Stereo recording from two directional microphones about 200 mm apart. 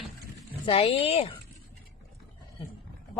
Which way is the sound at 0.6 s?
30° left (ahead or behind).